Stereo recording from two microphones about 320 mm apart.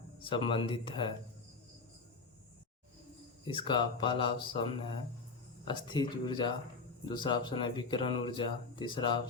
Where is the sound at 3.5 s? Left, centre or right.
Centre.